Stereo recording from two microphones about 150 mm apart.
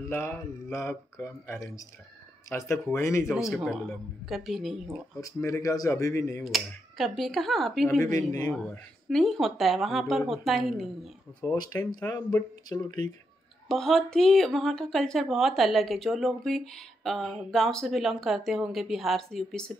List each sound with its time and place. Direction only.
0.1 s speech: 20° left (ahead or behind)
3.5 s speech: centre (ahead or behind)
5.2 s speech: 20° left (ahead or behind)
6.4 s speech: centre (ahead or behind)
11.4 s speech: 25° left (ahead or behind)
13.7 s speech: centre (ahead or behind)